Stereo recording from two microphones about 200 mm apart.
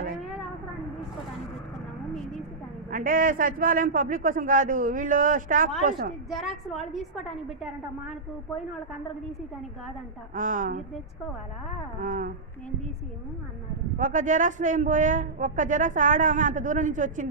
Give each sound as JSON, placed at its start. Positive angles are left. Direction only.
{"t": 2.1, "sound": "a sound", "side_deg": 0}
{"t": 2.9, "sound": "a man's voice", "side_deg": -45}
{"t": 6.3, "sound": "a woman's voice", "side_deg": 0}
{"t": 10.3, "sound": "a woman's voice", "side_deg": -40}
{"t": 12.0, "sound": "a woman's voice", "side_deg": -40}
{"t": 13.9, "sound": "a woman's voice", "side_deg": -40}